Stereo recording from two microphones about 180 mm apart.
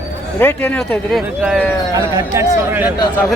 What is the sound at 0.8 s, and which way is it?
Speech, centre (ahead or behind).